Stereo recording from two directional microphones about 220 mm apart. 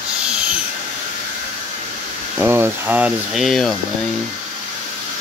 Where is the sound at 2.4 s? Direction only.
10° right (ahead or behind).